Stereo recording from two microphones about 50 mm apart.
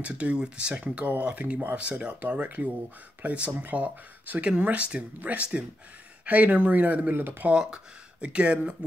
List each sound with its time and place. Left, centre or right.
0.0 s speech: right
3.7 s speech: right
7.2 s speech: right
7.6 s speech: centre